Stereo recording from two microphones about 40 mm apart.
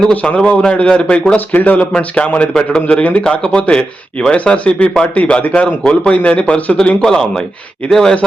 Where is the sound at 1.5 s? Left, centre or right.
Left.